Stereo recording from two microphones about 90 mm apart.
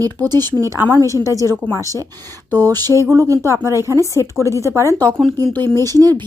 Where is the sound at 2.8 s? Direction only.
40° right (ahead or behind).